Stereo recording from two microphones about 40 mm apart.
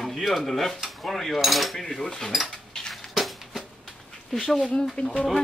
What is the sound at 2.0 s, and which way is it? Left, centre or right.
Speech, centre.